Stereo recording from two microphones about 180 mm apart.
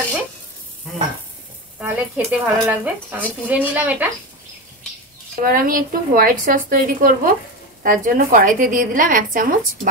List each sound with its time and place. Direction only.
1.8 s speech: 10° right (ahead or behind)
5.4 s speech: 50° right (ahead or behind)